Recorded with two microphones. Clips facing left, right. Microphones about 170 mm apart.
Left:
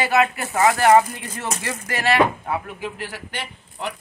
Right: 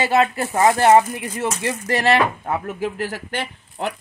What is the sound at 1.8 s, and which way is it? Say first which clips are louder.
Speech: right 1 dB; 35° right (ahead or behind).